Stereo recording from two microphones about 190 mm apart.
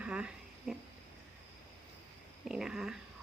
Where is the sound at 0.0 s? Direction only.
5° right (ahead or behind).